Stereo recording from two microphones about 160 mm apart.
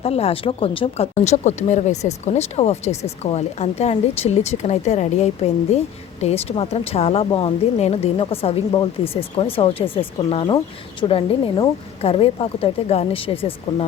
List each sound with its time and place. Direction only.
0.0 s a woman's voice: 40° left (ahead or behind)